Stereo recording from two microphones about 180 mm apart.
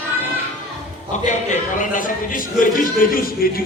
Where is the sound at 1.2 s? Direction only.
45° left (ahead or behind).